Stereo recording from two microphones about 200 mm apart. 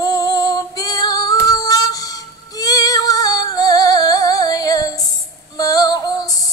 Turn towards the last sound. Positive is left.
turn(degrees=20)  # may be behind; listen again after turning